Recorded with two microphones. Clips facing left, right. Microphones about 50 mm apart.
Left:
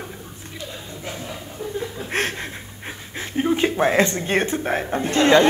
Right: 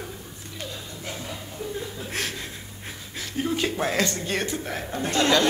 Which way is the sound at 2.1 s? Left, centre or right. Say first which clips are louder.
Left 8 dB; left.